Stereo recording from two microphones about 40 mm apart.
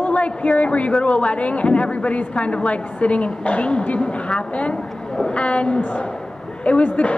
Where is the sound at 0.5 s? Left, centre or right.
Left.